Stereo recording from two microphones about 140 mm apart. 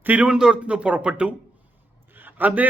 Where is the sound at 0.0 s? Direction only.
10° right (ahead or behind).